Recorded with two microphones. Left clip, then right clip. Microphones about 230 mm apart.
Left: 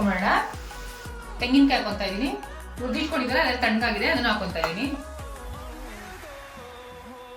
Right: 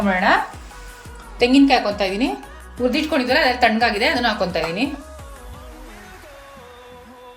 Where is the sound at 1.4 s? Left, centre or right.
Right.